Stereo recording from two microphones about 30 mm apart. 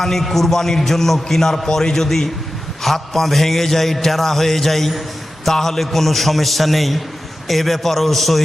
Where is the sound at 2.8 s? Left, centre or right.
Centre.